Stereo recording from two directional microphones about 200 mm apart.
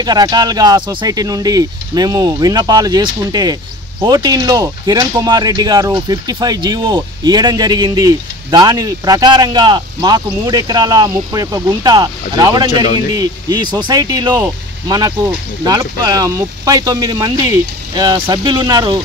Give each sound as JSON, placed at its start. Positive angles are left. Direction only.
{"t": 0.0, "sound": "speech", "side_deg": -20}